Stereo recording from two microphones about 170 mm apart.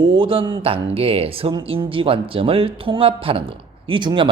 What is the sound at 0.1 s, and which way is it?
Speech, 30° right (ahead or behind).